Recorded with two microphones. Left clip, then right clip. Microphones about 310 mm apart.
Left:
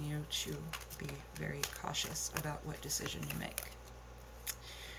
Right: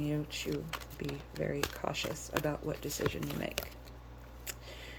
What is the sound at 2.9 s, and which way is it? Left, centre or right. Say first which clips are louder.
Speech: right 3 dB; right.